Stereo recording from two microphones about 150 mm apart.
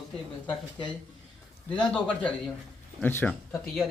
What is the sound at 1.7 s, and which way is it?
A man's voice, 5° left (ahead or behind).